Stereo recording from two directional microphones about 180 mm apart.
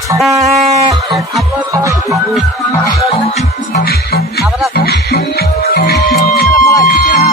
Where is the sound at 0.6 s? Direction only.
35° right (ahead or behind).